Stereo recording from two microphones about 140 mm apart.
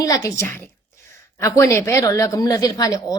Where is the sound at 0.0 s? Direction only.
25° left (ahead or behind).